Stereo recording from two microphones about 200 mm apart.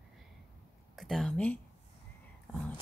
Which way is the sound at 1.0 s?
Centre (ahead or behind).